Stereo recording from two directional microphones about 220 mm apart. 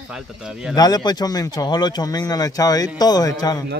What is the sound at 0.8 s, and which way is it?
Speech, 20° left (ahead or behind).